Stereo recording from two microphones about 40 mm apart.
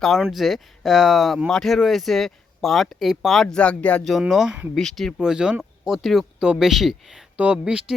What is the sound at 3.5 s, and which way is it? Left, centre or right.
Speech, left.